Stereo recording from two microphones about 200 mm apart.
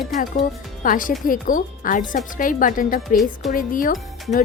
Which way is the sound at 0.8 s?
45° left (ahead or behind).